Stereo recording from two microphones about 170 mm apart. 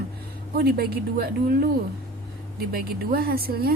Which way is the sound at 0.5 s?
65° right (ahead or behind).